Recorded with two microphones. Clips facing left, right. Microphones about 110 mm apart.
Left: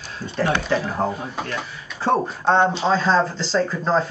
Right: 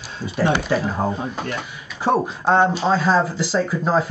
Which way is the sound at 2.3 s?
5° right (ahead or behind).